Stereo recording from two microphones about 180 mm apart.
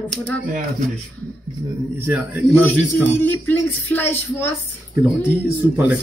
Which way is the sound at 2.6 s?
10° left (ahead or behind).